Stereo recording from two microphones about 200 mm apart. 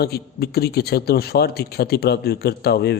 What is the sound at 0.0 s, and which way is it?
Speech, 50° left (ahead or behind).